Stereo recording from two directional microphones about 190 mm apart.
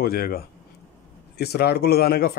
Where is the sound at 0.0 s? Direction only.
50° left (ahead or behind).